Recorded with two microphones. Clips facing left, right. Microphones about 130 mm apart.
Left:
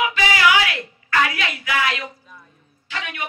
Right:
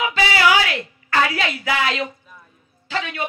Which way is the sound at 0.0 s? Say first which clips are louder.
Even; 30° right (ahead or behind).